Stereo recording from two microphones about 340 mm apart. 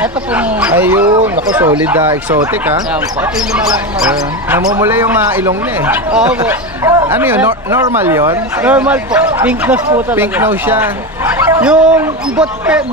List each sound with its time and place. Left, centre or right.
0.0 s speech: centre